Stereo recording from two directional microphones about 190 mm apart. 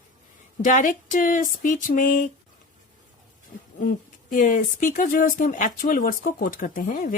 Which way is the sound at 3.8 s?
45° left (ahead or behind).